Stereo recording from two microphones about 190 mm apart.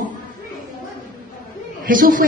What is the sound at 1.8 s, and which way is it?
Speech, 45° right (ahead or behind).